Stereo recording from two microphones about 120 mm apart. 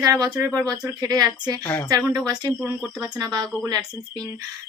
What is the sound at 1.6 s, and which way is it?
Speech, 15° left (ahead or behind).